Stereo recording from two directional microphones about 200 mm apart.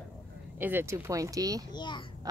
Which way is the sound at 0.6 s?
10° right (ahead or behind).